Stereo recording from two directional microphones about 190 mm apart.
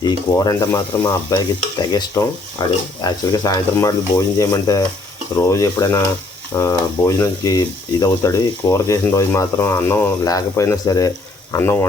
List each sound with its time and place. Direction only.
0.0 s speech: 20° left (ahead or behind)